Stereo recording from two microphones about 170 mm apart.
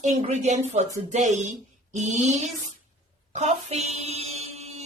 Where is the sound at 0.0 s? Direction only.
40° right (ahead or behind).